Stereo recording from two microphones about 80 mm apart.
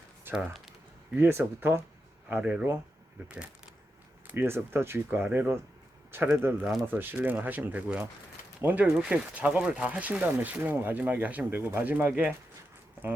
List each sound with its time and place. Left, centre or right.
0.3 s speech: centre
1.1 s speech: right
2.3 s speech: centre
4.3 s speech: right